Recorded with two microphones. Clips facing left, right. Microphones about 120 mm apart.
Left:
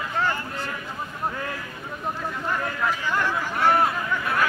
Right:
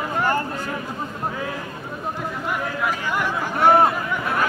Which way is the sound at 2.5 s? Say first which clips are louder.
Right 1 dB; 10° right (ahead or behind).